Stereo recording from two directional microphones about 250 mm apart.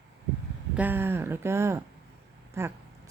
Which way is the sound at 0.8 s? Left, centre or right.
Centre.